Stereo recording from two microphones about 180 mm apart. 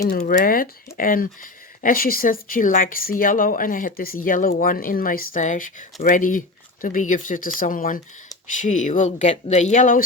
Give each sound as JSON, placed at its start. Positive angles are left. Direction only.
{"t": 0.2, "sound": "speech", "side_deg": 45}